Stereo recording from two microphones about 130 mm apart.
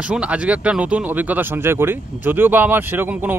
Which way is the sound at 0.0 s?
10° right (ahead or behind).